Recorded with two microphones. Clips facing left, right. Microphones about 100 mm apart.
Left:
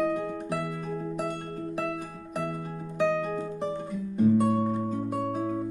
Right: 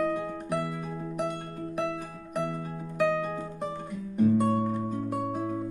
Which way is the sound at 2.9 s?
Centre (ahead or behind).